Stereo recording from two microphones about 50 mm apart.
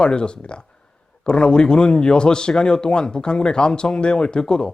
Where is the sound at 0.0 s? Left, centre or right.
Centre.